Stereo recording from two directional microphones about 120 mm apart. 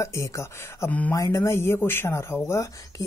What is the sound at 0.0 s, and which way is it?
Speech, 25° left (ahead or behind).